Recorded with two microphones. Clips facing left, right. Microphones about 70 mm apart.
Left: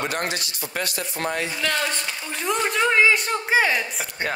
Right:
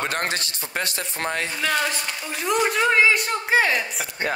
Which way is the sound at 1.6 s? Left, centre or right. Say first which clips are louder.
Right 1 dB; centre.